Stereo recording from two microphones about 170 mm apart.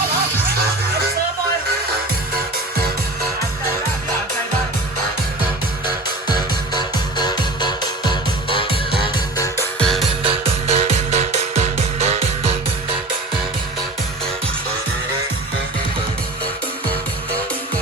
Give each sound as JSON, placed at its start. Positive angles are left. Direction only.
{"t": 6.3, "sound": "music", "side_deg": 25}
{"t": 9.7, "sound": "music", "side_deg": 5}
{"t": 10.2, "sound": "music", "side_deg": -35}